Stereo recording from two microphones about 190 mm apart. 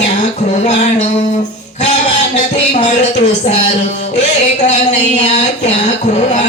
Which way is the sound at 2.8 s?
35° left (ahead or behind).